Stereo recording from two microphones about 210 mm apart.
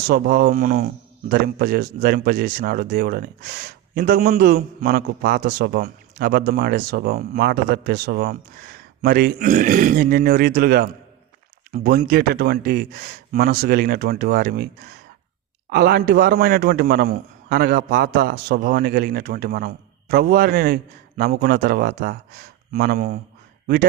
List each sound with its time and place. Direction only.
0.1 s speech: 45° right (ahead or behind)